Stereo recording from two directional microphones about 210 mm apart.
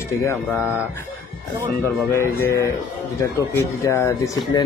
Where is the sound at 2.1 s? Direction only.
15° left (ahead or behind).